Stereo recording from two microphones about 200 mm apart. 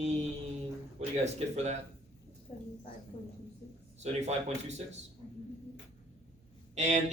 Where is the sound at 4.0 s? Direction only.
35° right (ahead or behind).